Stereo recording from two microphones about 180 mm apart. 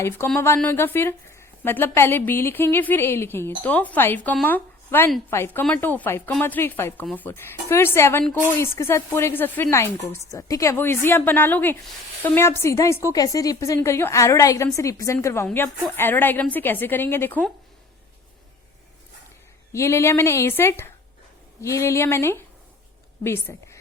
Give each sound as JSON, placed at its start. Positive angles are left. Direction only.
{"t": 0.3, "sound": "a woman's voice", "side_deg": 15}
{"t": 19.7, "sound": "a woman's voice", "side_deg": 15}